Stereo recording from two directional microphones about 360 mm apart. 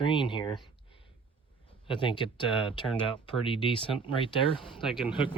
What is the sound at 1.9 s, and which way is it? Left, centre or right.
Speech, centre.